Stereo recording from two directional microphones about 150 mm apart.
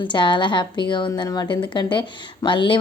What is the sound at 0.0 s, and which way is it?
A woman's voice, 30° left (ahead or behind).